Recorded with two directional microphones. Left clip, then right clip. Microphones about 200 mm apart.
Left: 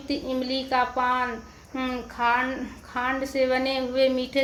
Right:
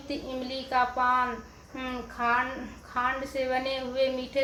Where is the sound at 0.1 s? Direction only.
50° left (ahead or behind).